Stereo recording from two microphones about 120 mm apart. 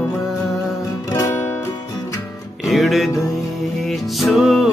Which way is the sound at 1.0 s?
30° left (ahead or behind).